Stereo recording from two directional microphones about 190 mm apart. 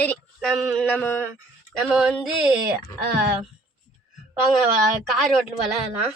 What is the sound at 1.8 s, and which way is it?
Speech, centre (ahead or behind).